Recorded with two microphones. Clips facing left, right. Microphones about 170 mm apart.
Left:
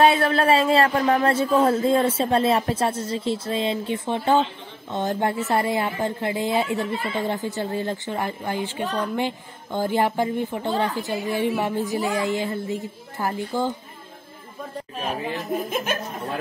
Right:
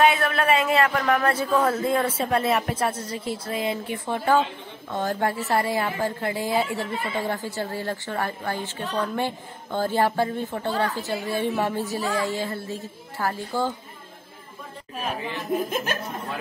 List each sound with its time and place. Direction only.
0.0 s a woman's voice: 30° left (ahead or behind)
15.5 s speech: 5° left (ahead or behind)